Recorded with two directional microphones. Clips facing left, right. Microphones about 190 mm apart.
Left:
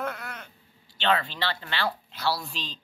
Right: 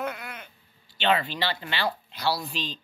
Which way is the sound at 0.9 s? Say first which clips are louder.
Right 1 dB; 5° right (ahead or behind).